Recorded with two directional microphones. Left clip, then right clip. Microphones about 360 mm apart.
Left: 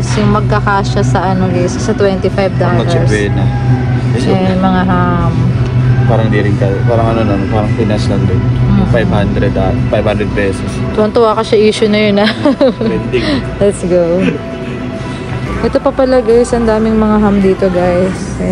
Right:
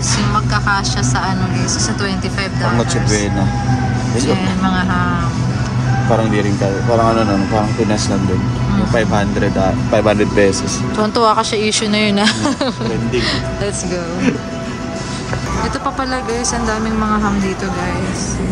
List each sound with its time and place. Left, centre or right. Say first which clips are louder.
0.5 s speech: left 4 dB; centre
4.3 s speech: left 7 dB; centre
7.1 s speech: left 1 dB; right
9.1 s speech: left 2 dB; right
11.0 s a woman's voice: left 4 dB; centre
16.1 s speech: left 10 dB; centre